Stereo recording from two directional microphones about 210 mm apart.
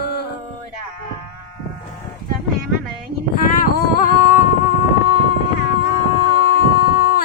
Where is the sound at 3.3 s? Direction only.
40° left (ahead or behind).